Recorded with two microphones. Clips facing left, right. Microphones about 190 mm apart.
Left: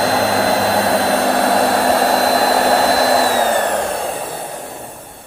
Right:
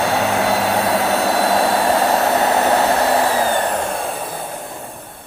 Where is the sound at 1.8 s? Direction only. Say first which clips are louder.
Left 2 dB; 35° left (ahead or behind).